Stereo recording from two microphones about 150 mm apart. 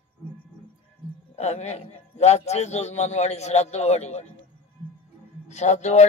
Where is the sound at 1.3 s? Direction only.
45° left (ahead or behind).